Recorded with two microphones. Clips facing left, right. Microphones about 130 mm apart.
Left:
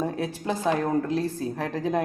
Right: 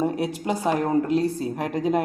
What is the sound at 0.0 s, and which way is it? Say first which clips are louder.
A woman's voice: right 4 dB; 15° right (ahead or behind).